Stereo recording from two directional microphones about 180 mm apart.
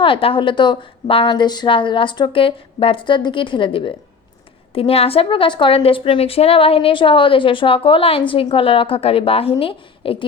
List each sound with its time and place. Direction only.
0.0 s a woman's voice: 30° left (ahead or behind)